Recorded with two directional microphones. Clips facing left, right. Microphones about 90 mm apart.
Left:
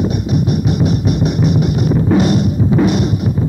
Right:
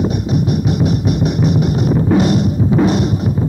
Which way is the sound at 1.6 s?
35° right (ahead or behind).